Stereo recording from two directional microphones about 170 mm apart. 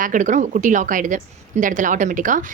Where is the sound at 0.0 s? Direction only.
50° right (ahead or behind).